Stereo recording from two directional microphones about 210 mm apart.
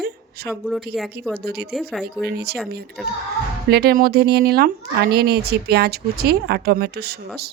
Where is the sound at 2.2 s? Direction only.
50° right (ahead or behind).